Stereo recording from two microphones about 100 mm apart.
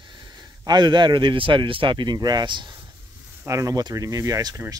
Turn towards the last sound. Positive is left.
turn(degrees=-35)  # may be behind; listen again after turning